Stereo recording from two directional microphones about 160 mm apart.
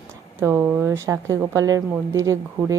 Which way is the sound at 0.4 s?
15° right (ahead or behind).